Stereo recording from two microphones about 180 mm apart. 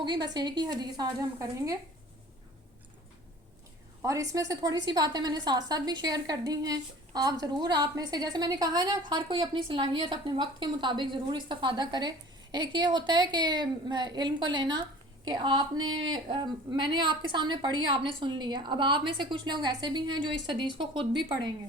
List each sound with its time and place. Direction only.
0.0 s a woman's voice: 25° right (ahead or behind)
4.0 s a woman's voice: 20° right (ahead or behind)